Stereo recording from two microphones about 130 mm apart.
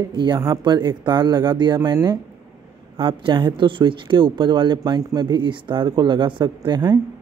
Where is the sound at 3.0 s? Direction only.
40° right (ahead or behind).